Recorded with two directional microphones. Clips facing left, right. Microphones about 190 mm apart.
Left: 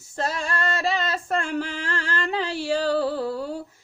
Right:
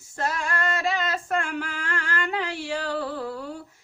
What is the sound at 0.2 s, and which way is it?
Female singing, 30° left (ahead or behind).